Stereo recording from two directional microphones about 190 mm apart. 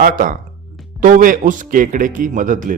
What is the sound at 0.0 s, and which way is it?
A man's voice, 45° right (ahead or behind).